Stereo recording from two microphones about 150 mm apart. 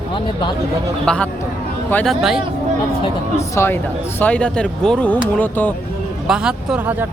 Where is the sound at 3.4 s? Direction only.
20° left (ahead or behind).